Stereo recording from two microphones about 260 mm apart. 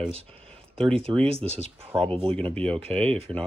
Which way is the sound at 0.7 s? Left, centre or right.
Right.